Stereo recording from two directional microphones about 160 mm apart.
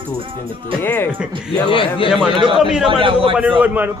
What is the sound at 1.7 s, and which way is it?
Speech, 35° left (ahead or behind).